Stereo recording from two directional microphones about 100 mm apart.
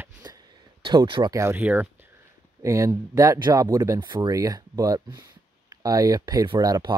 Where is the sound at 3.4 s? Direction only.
45° right (ahead or behind).